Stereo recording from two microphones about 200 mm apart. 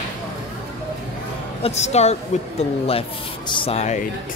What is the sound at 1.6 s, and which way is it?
A woman's voice, 35° left (ahead or behind).